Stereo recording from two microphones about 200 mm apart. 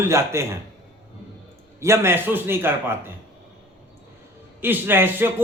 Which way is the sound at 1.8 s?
15° right (ahead or behind).